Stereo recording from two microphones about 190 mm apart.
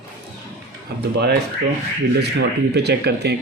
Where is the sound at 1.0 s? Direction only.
60° right (ahead or behind).